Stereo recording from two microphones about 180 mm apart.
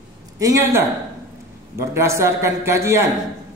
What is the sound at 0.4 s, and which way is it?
Speech, 15° right (ahead or behind).